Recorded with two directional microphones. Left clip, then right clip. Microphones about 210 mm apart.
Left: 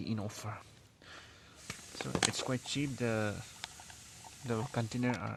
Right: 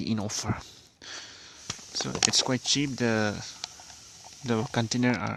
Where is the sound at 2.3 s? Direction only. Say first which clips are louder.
Right 12 dB; 45° right (ahead or behind).